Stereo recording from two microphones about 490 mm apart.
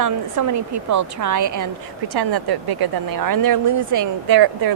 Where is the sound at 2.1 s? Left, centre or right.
Right.